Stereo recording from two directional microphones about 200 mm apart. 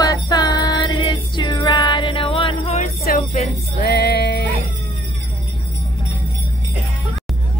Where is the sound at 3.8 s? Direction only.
55° left (ahead or behind).